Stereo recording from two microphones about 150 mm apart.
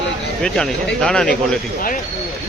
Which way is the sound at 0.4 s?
5° left (ahead or behind).